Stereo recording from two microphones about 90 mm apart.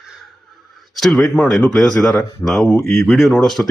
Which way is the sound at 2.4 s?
Centre (ahead or behind).